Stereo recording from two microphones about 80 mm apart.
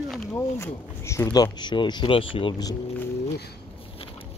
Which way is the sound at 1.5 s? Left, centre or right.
Left.